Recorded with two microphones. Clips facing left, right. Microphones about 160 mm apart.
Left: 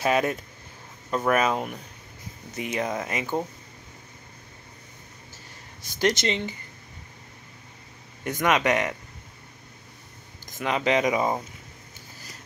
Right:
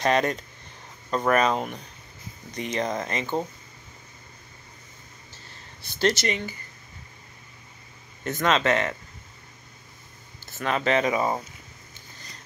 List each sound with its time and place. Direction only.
0.0 s speech: 5° left (ahead or behind)
5.8 s speech: 15° left (ahead or behind)
8.2 s speech: 15° left (ahead or behind)
10.4 s speech: 15° left (ahead or behind)